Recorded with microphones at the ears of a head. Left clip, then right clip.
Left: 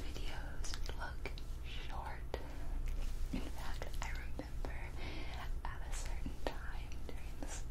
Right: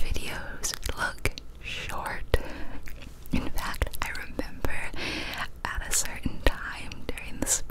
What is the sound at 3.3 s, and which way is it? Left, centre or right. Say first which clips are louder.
Whispering: right 15 dB; right.